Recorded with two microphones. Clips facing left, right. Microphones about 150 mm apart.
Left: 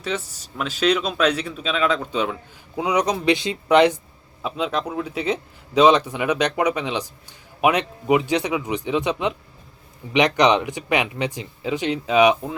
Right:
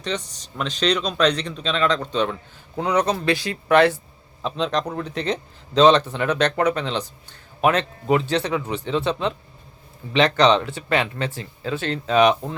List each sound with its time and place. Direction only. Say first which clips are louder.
0.0 s a man's voice: left 1 dB; 5° left (ahead or behind)